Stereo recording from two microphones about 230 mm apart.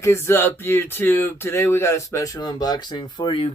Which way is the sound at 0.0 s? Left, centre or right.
Centre.